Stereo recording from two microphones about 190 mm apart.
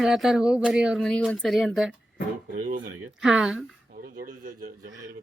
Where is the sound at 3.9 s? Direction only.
50° right (ahead or behind).